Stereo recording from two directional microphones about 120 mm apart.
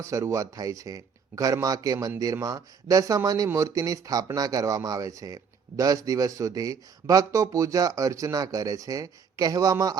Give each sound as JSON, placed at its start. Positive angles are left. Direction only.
{"t": 0.0, "sound": "speech", "side_deg": -25}